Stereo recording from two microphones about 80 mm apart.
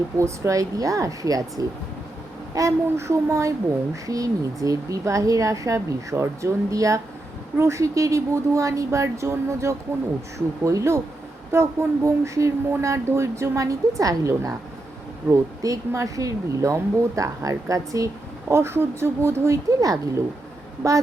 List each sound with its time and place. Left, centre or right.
0.2 s speech: right
2.6 s speech: right